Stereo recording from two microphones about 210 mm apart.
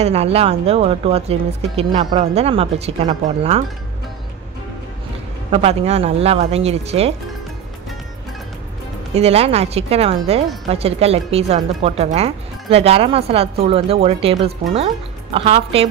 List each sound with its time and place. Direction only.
0.0 s speech: 30° right (ahead or behind)
5.5 s speech: 30° right (ahead or behind)
9.1 s speech: 30° right (ahead or behind)
15.3 s speech: 30° right (ahead or behind)